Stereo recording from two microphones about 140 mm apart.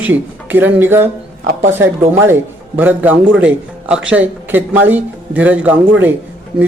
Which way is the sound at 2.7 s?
10° right (ahead or behind).